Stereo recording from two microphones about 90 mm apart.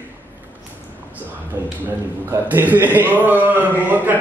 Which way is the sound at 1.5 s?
20° right (ahead or behind).